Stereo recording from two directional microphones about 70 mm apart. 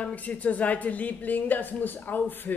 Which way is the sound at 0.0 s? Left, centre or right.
Left.